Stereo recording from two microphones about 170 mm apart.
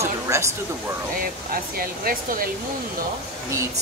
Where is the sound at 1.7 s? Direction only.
60° right (ahead or behind).